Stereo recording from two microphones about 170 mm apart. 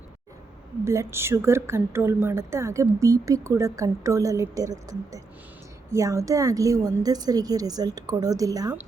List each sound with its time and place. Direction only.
0.9 s a woman's voice: 15° right (ahead or behind)